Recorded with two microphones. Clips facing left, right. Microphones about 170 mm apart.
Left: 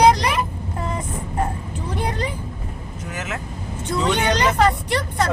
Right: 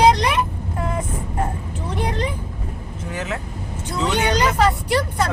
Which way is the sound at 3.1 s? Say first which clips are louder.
Right 3 dB; 30° right (ahead or behind).